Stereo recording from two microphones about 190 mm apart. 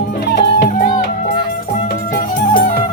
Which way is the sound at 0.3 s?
60° left (ahead or behind).